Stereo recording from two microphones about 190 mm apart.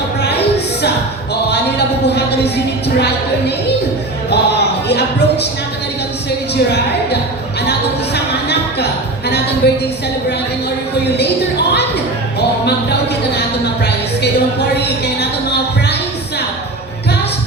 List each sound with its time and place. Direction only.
2.0 s speech: 60° left (ahead or behind)
4.3 s speech: 60° left (ahead or behind)
6.5 s speech: 60° left (ahead or behind)
7.6 s music: 60° left (ahead or behind)
9.6 s speech: 60° left (ahead or behind)
14.8 s music: 60° left (ahead or behind)